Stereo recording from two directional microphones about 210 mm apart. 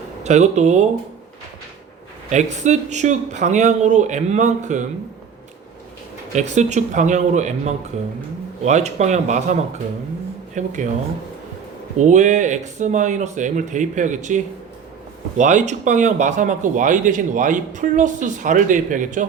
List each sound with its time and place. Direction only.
0.2 s speech: 35° right (ahead or behind)
2.3 s speech: 35° right (ahead or behind)
6.3 s speech: 35° right (ahead or behind)
11.9 s speech: 35° right (ahead or behind)